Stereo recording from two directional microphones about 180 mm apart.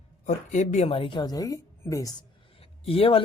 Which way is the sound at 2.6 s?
30° left (ahead or behind).